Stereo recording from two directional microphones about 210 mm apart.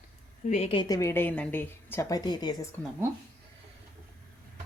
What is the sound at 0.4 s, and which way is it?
A woman's voice, 30° left (ahead or behind).